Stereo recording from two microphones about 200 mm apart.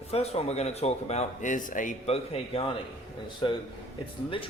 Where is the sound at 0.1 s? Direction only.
30° left (ahead or behind).